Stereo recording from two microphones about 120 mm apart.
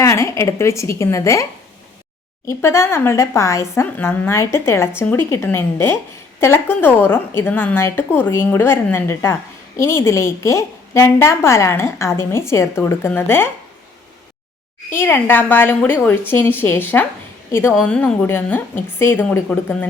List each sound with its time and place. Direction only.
0.0 s a woman's voice: 25° left (ahead or behind)
2.5 s a woman's voice: 20° left (ahead or behind)
14.9 s a woman's voice: 15° left (ahead or behind)
17.7 s a woman's voice: 10° left (ahead or behind)